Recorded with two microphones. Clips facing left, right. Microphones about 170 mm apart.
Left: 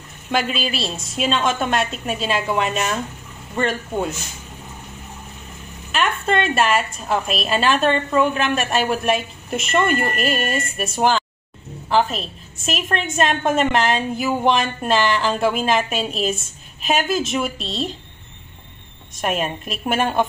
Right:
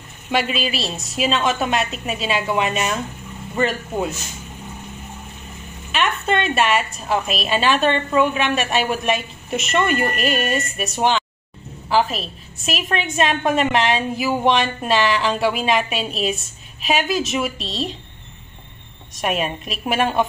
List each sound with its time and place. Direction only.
0.3 s a woman's voice: centre (ahead or behind)
5.9 s a sound: centre (ahead or behind)
6.2 s a woman's voice: centre (ahead or behind)
19.1 s a woman's voice: centre (ahead or behind)